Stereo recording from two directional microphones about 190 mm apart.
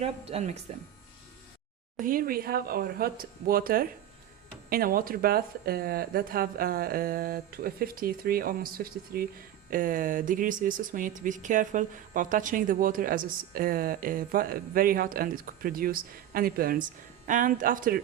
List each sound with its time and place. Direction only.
0.0 s speech: 35° right (ahead or behind)
2.0 s speech: 45° right (ahead or behind)